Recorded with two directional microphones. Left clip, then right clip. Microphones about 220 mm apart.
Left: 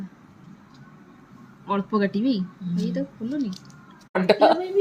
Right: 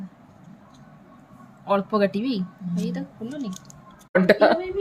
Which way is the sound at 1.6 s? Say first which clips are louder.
Right 3 dB; 50° right (ahead or behind).